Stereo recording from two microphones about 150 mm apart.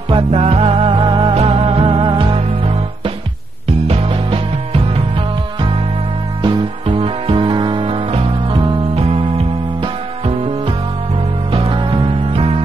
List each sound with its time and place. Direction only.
0.1 s music: 40° right (ahead or behind)
3.8 s music: 40° right (ahead or behind)
6.4 s music: 30° right (ahead or behind)
11.5 s music: 35° right (ahead or behind)